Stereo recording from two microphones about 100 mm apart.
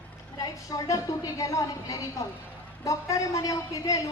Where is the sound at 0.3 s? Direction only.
35° left (ahead or behind).